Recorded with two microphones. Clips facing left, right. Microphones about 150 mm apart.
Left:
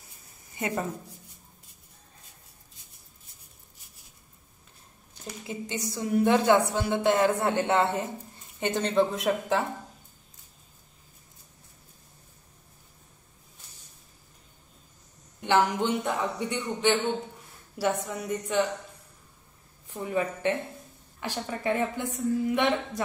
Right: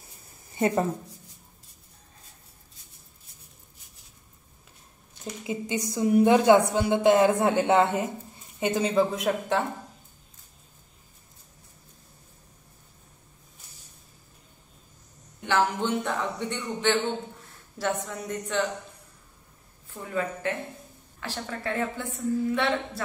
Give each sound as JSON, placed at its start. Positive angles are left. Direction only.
{"t": 0.6, "sound": "speech", "side_deg": -30}
{"t": 5.5, "sound": "a woman's voice", "side_deg": -15}
{"t": 15.4, "sound": "a woman's voice", "side_deg": 15}
{"t": 19.9, "sound": "a woman's voice", "side_deg": 15}